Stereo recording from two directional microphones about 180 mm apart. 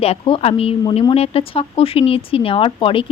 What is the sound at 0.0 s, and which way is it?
A woman's voice, 30° left (ahead or behind).